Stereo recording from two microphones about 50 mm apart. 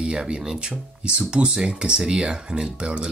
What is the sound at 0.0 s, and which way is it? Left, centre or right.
Speech, centre.